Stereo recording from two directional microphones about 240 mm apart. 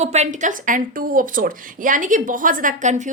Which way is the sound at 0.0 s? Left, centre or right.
Right.